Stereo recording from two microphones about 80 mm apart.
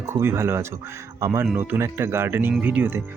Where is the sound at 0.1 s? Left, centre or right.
Right.